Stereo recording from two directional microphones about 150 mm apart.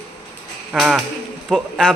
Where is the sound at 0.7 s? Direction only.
5° right (ahead or behind).